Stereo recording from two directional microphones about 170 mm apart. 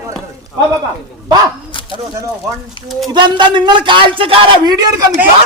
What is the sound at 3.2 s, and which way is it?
Speech, 25° right (ahead or behind).